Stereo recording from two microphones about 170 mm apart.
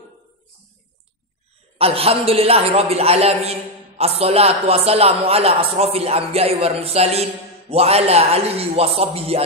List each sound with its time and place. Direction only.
1.8 s a man's voice: 35° right (ahead or behind)